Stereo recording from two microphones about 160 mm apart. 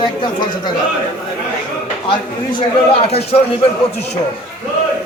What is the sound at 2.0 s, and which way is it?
A man's voice, 30° left (ahead or behind).